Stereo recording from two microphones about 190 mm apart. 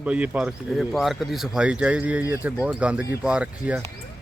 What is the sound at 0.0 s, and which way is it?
Speech, 5° right (ahead or behind).